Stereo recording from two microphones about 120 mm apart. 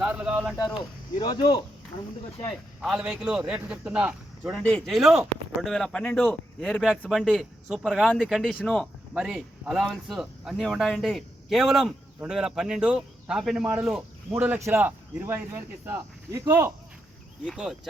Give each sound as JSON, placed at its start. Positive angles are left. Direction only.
{"t": 0.0, "sound": "a sound", "side_deg": -10}
{"t": 1.1, "sound": "speech", "side_deg": 40}
{"t": 2.8, "sound": "a man's voice", "side_deg": -5}
{"t": 6.7, "sound": "speech", "side_deg": 0}